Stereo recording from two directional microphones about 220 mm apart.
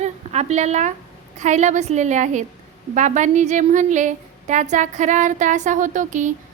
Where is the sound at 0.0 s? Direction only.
30° right (ahead or behind).